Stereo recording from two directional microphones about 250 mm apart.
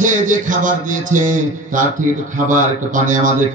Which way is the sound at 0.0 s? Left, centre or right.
Right.